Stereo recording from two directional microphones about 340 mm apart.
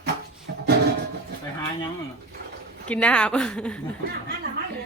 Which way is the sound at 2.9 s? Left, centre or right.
Centre.